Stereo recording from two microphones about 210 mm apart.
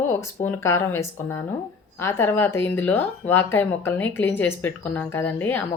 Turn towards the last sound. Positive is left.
turn(degrees=10)  # may be behind; listen again after turning